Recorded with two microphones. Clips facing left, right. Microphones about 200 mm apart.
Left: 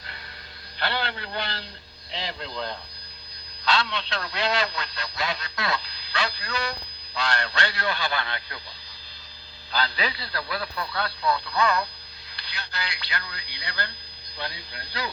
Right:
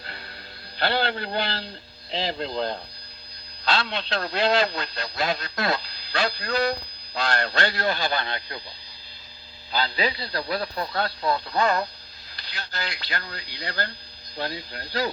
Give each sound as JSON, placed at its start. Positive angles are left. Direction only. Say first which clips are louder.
{"t": 0.8, "sound": "a man's voice", "louder": "right 5 dB", "side_deg": -30}
{"t": 3.7, "sound": "a man's voice", "louder": "right 1 dB", "side_deg": -55}
{"t": 8.2, "sound": "speech", "louder": "right 2 dB", "side_deg": -30}
{"t": 10.3, "sound": "a man's voice", "louder": "right 4 dB", "side_deg": -40}